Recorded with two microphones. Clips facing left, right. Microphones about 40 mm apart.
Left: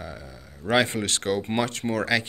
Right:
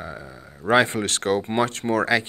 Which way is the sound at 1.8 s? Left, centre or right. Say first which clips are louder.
Right 4 dB; right.